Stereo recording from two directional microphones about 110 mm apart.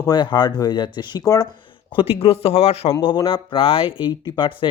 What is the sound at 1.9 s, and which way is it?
Speech, 60° left (ahead or behind).